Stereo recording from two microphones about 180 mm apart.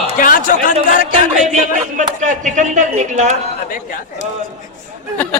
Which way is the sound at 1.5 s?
45° right (ahead or behind).